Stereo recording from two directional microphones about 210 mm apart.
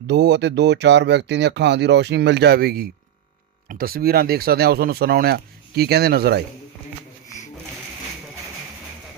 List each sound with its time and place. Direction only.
0.1 s speech: 55° right (ahead or behind)